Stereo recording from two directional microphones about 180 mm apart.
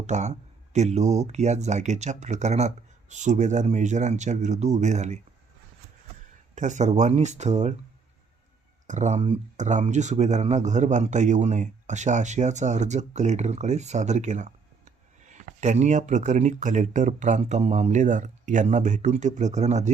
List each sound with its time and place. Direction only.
0.0 s speech: 40° right (ahead or behind)
6.6 s speech: 40° right (ahead or behind)
8.9 s speech: 40° right (ahead or behind)